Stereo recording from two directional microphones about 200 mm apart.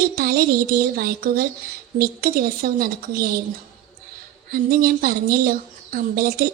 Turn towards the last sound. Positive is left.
turn(degrees=-45)  # may be behind; listen again after turning